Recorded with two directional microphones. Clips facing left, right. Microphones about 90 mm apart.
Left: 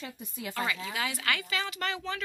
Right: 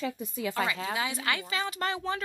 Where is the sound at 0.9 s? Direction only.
25° right (ahead or behind).